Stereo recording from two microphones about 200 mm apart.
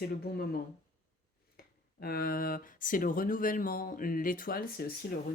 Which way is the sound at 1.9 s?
50° left (ahead or behind).